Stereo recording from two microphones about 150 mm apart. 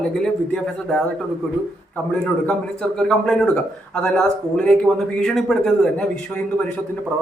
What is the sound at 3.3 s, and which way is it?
A man's voice, centre (ahead or behind).